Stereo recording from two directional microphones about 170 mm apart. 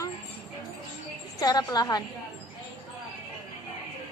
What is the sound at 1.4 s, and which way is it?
Speech, 25° left (ahead or behind).